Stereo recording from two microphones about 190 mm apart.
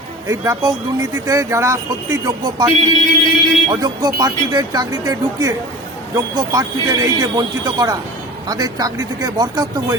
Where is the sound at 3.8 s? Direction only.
20° right (ahead or behind).